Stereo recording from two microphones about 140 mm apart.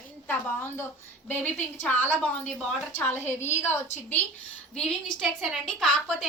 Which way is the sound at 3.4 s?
55° left (ahead or behind).